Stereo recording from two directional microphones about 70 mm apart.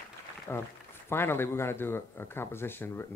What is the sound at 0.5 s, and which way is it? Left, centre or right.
Speech, left.